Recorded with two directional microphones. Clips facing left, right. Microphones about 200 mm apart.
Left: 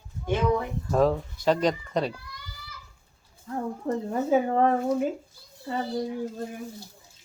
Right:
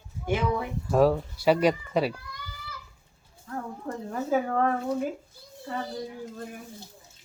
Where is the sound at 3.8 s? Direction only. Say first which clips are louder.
Left 6 dB; 25° left (ahead or behind).